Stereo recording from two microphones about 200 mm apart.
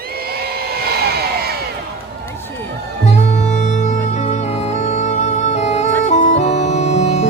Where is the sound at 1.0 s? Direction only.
50° right (ahead or behind).